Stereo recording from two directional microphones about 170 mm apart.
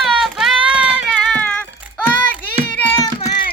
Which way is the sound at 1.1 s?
5° left (ahead or behind).